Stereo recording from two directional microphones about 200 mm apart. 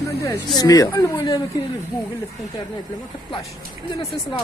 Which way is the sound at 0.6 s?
20° left (ahead or behind).